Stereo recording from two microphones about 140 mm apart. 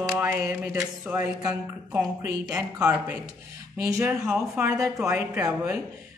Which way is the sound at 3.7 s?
20° right (ahead or behind).